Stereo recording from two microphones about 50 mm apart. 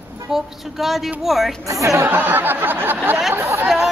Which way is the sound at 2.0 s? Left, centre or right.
Right.